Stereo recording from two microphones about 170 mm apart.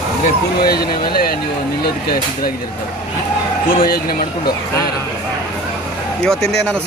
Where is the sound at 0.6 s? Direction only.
65° left (ahead or behind).